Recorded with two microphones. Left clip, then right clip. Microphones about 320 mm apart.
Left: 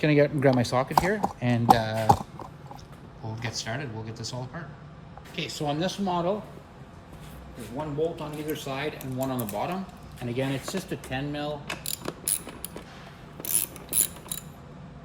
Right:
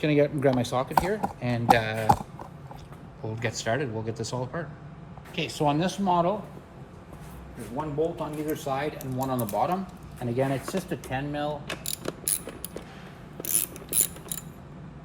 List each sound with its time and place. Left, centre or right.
0.0 s speech: left
3.3 s speech: centre
7.8 s speech: centre
8.6 s speech: centre
10.3 s speech: centre
11.7 s mechanisms: centre